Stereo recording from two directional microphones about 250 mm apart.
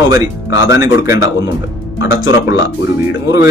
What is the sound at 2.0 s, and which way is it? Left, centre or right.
Speech, left.